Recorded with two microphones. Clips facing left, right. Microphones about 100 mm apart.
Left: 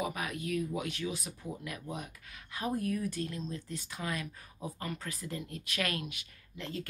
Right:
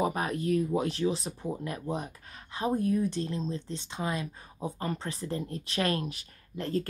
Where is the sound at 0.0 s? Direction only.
35° right (ahead or behind).